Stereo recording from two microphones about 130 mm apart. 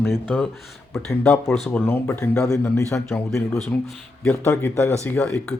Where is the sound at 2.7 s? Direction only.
20° left (ahead or behind).